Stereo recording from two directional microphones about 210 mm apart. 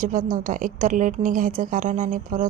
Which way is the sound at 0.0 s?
40° right (ahead or behind).